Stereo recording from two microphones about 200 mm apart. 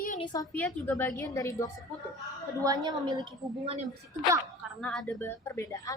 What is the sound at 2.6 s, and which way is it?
Speech, 20° right (ahead or behind).